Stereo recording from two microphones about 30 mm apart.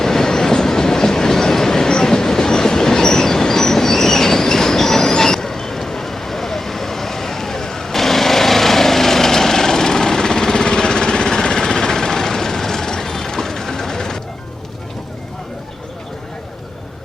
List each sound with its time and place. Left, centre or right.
0.0 s train: centre